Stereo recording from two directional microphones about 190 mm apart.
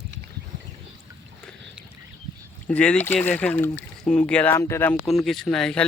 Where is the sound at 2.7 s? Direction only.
5° left (ahead or behind).